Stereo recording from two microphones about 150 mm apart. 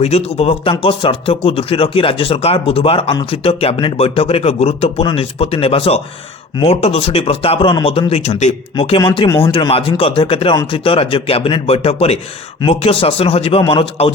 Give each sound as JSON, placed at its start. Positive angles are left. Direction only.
{"t": 0.0, "sound": "speech", "side_deg": 45}